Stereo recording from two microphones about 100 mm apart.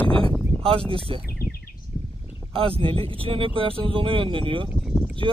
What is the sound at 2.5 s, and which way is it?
Speech, 65° right (ahead or behind).